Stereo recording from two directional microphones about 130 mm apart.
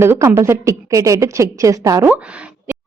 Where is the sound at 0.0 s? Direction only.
20° right (ahead or behind).